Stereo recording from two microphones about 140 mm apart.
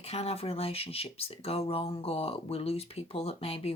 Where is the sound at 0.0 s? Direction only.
45° left (ahead or behind).